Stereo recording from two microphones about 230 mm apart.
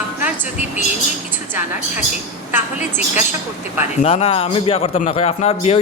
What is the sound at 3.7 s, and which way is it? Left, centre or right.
Speech, left.